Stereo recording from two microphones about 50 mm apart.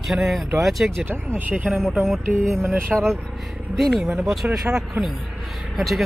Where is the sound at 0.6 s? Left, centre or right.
Centre.